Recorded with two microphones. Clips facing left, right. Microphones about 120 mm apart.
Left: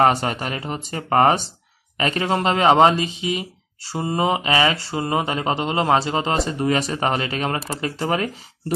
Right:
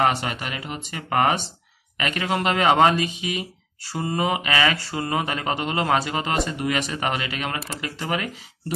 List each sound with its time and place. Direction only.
0.0 s speech: 40° left (ahead or behind)